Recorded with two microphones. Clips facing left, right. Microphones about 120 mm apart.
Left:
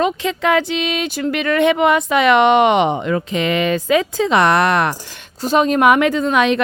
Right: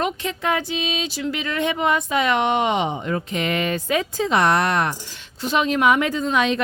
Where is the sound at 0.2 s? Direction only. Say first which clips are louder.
Left 7 dB; 90° left; by 5.1 s 75° left (ahead or behind).